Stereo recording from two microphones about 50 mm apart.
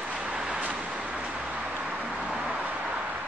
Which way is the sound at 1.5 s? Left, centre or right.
Right.